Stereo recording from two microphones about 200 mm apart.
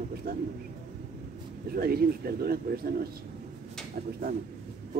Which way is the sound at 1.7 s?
50° right (ahead or behind).